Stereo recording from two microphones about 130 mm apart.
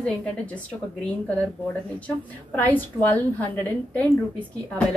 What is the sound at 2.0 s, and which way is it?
A woman's voice, 10° left (ahead or behind).